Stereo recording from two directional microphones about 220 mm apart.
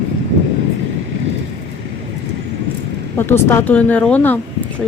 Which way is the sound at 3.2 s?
10° left (ahead or behind).